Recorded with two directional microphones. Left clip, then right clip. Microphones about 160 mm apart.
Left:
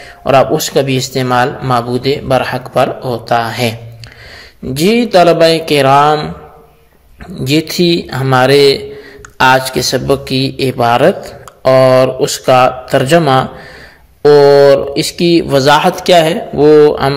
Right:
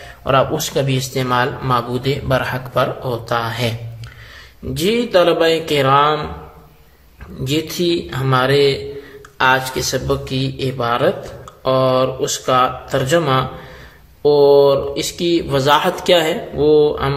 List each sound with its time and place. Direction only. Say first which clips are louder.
0.2 s speech: left 7 dB; 30° left (ahead or behind)
4.7 s speech: left 6 dB; 35° left (ahead or behind)
7.3 s speech: left 7 dB; 40° left (ahead or behind)